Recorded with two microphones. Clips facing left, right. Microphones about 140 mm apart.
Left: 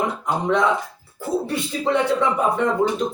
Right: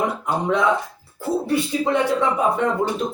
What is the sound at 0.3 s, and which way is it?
Speech, 10° right (ahead or behind).